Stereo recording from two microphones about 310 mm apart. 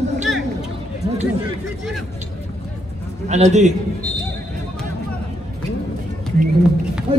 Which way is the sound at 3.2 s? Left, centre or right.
Right.